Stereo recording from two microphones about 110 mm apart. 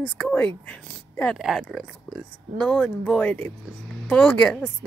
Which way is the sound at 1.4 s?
Centre (ahead or behind).